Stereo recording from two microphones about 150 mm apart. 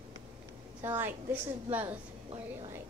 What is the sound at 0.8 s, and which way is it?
Speech, 15° right (ahead or behind).